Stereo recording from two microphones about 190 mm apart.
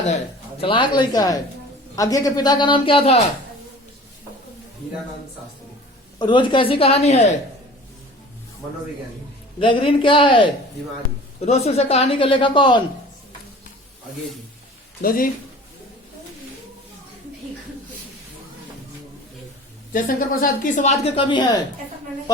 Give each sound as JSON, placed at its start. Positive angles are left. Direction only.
{"t": 0.6, "sound": "a man's voice", "side_deg": 25}
{"t": 6.1, "sound": "a man's voice", "side_deg": 25}
{"t": 9.6, "sound": "a man's voice", "side_deg": 25}
{"t": 15.0, "sound": "speech", "side_deg": 50}
{"t": 19.9, "sound": "a woman's voice", "side_deg": 45}